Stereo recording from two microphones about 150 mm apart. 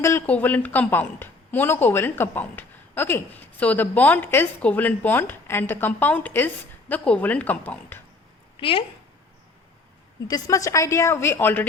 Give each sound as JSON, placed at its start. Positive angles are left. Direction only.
{"t": 0.0, "sound": "a woman's voice", "side_deg": 15}
{"t": 8.5, "sound": "speech", "side_deg": 35}
{"t": 10.2, "sound": "a woman's voice", "side_deg": 25}